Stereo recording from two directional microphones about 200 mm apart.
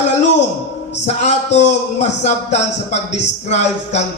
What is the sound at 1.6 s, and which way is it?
Speech, 35° left (ahead or behind).